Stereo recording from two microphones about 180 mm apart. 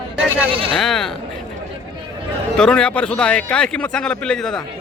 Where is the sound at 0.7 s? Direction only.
Centre (ahead or behind).